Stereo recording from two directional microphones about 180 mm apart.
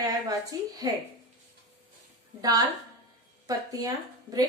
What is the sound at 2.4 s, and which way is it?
A woman's voice, 20° right (ahead or behind).